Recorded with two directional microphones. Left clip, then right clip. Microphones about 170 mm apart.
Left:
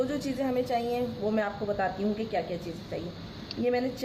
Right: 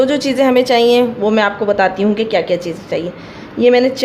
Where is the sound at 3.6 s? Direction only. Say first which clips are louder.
Right 18 dB; 50° right (ahead or behind).